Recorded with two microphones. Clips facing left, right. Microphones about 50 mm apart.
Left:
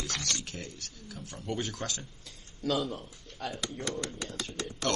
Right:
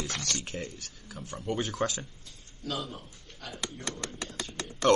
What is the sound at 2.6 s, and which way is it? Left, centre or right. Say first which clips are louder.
Speech: left 5 dB; left.